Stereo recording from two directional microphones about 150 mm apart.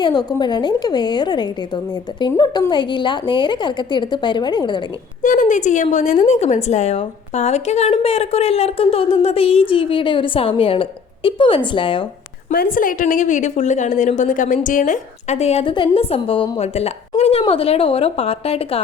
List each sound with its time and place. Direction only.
0.0 s a woman's voice: 25° left (ahead or behind)
5.2 s a woman's voice: 60° left (ahead or behind); by 12.0 s 35° left (ahead or behind)
12.5 s a woman's voice: 65° left (ahead or behind); by 18.8 s 40° left (ahead or behind)